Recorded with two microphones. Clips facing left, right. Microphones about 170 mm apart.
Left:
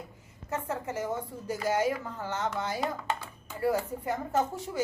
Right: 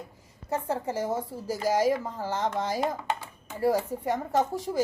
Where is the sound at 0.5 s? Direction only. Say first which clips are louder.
Right 4 dB; 30° right (ahead or behind).